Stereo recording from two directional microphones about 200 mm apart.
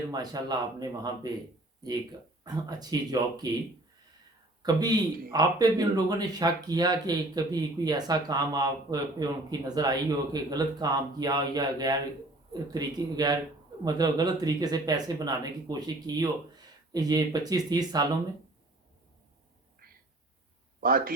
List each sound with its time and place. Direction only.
0.1 s speech: 20° right (ahead or behind)
2.4 s speech: 20° right (ahead or behind)
4.6 s speech: 20° right (ahead or behind)
20.8 s speech: 45° right (ahead or behind)